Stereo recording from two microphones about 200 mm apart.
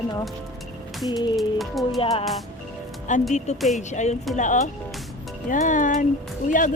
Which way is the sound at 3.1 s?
40° left (ahead or behind).